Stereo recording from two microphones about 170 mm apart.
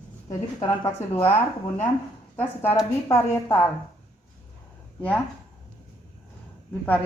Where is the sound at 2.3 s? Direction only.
10° left (ahead or behind).